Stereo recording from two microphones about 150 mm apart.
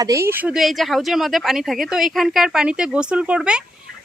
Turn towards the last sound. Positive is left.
turn(degrees=-5)  # may be behind; listen again after turning